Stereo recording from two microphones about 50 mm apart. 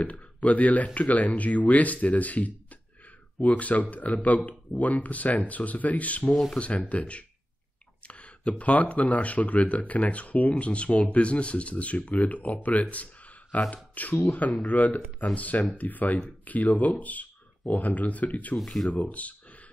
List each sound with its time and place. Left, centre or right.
0.0 s speech: left
12.8 s a sound: left
13.9 s speech: left